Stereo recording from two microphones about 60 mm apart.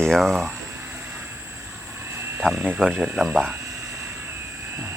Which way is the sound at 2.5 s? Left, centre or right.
Right.